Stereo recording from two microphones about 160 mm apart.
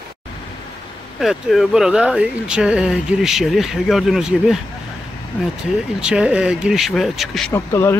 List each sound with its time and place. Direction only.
1.2 s speech: centre (ahead or behind)
5.9 s speech: 5° right (ahead or behind)
7.5 s speech: 15° left (ahead or behind)